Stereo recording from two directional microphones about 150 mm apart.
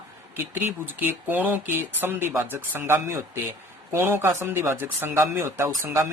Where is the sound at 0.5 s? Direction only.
15° right (ahead or behind).